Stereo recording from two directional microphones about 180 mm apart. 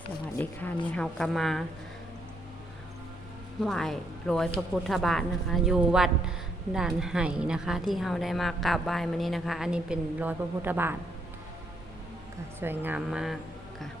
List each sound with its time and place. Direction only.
0.4 s a woman's voice: 10° left (ahead or behind)
3.6 s a woman's voice: centre (ahead or behind)
12.5 s a woman's voice: 10° right (ahead or behind)